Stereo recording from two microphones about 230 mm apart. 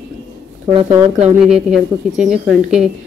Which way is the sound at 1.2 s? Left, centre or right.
Centre.